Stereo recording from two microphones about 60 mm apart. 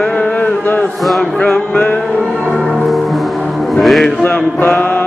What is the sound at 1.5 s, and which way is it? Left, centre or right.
Music, left.